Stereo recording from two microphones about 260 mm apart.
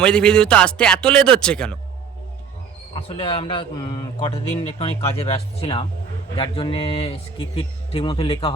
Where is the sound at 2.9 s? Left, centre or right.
Left.